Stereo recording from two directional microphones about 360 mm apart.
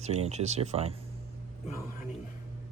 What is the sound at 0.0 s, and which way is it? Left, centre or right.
Speech, centre.